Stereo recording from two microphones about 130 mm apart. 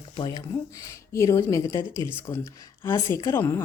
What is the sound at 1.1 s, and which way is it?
A woman's voice, 25° left (ahead or behind).